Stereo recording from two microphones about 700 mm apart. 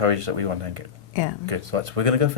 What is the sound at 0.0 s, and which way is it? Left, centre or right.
Speech, right.